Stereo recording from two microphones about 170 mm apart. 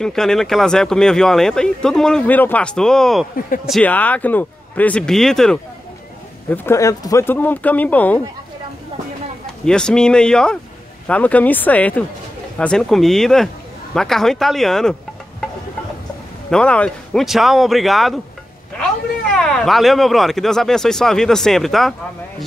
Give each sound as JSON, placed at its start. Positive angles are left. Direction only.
{"t": 0.0, "sound": "speech", "side_deg": 5}
{"t": 3.3, "sound": "speech", "side_deg": 55}
{"t": 3.8, "sound": "speech", "side_deg": 10}
{"t": 6.5, "sound": "speech", "side_deg": 15}
{"t": 9.7, "sound": "speech", "side_deg": 5}
{"t": 16.4, "sound": "speech", "side_deg": 5}